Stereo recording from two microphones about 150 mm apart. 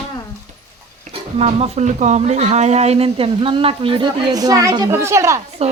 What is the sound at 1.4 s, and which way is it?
Speech, 45° right (ahead or behind).